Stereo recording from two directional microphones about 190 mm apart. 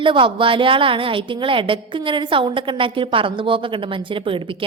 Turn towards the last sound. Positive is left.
turn(degrees=-25)  # may be behind; listen again after turning